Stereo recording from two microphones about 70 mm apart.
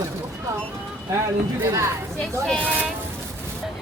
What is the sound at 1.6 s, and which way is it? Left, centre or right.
Speech, right.